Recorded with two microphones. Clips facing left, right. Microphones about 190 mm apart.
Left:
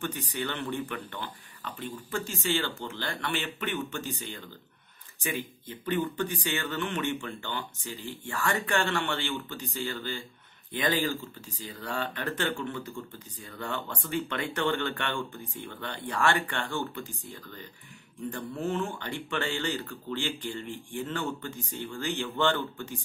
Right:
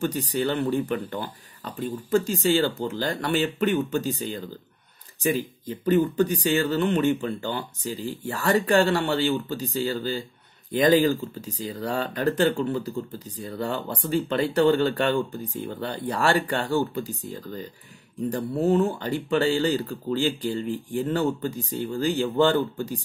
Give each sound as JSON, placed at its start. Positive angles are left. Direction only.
{"t": 0.0, "sound": "speech", "side_deg": -35}
{"t": 8.0, "sound": "speech", "side_deg": -10}
{"t": 8.3, "sound": "speech", "side_deg": -35}